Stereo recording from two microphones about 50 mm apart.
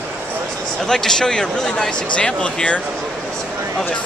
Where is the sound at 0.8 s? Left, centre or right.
Centre.